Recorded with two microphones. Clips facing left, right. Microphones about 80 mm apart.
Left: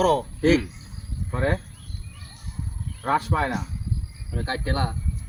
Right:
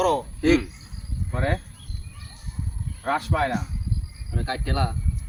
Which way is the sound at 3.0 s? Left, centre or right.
Left.